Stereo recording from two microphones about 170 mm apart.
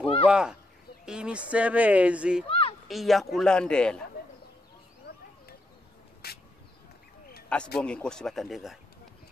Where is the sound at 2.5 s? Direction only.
35° left (ahead or behind).